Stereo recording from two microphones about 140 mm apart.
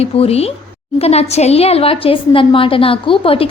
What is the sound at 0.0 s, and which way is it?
A woman's voice, 45° left (ahead or behind).